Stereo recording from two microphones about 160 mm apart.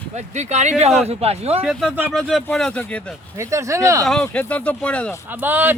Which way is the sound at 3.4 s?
20° right (ahead or behind).